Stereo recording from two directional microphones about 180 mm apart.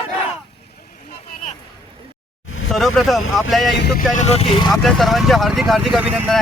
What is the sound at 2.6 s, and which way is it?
Vehicle, centre (ahead or behind).